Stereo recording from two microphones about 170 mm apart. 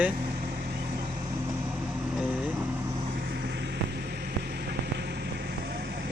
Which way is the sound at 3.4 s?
90° right.